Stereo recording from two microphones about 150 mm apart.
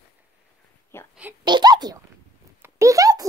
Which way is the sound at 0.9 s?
15° left (ahead or behind).